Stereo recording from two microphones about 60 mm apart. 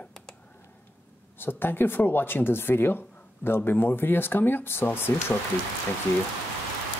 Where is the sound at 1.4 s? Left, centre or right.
Left.